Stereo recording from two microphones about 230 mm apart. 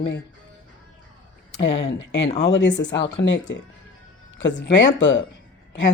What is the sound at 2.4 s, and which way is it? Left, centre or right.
Speech, left.